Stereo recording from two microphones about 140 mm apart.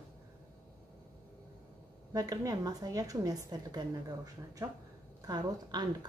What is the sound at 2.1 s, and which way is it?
Speech, 25° right (ahead or behind).